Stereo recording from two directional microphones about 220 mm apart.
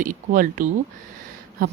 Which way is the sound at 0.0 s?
35° right (ahead or behind).